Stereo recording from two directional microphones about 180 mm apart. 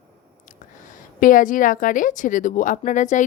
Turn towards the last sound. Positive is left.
turn(degrees=45)  # may be behind; listen again after turning